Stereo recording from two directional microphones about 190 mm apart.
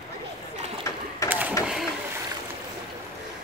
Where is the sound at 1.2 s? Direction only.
10° right (ahead or behind).